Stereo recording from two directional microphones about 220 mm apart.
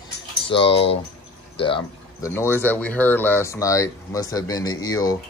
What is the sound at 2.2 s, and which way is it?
Speech, 10° left (ahead or behind).